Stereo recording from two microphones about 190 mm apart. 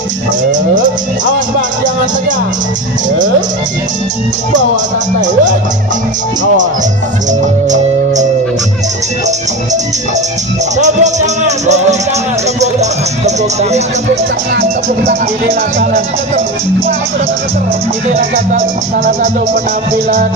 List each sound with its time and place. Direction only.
0.5 s speech: 45° right (ahead or behind)
5.2 s speech: 40° right (ahead or behind)
7.3 s speech: 40° right (ahead or behind)
10.8 s speech: 40° right (ahead or behind)
14.6 s speech: 55° right (ahead or behind)